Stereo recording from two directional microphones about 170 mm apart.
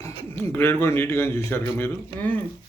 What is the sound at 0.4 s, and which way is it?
Speech, 15° left (ahead or behind).